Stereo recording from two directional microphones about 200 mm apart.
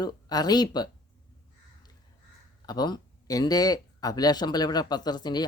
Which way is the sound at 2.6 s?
20° left (ahead or behind).